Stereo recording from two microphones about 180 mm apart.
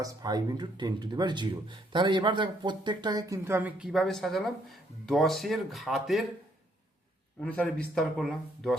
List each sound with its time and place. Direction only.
0.0 s speech: 20° right (ahead or behind); by 6.2 s centre (ahead or behind)
7.4 s speech: 5° left (ahead or behind)